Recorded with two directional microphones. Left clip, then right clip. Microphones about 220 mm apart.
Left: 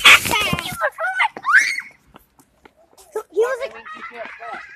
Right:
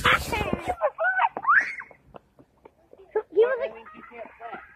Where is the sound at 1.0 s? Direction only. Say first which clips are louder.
Left 3 dB; 90° left.